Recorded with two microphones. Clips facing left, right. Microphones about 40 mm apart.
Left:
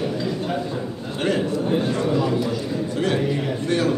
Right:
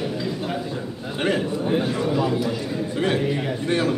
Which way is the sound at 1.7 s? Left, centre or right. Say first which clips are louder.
Even; centre.